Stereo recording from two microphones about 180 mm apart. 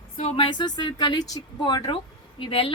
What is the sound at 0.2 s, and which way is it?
A woman's voice, 30° left (ahead or behind).